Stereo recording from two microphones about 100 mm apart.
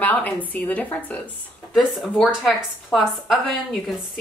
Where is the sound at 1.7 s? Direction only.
Centre (ahead or behind).